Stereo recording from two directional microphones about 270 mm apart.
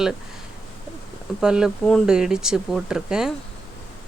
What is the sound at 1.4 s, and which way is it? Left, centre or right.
A woman's voice, centre.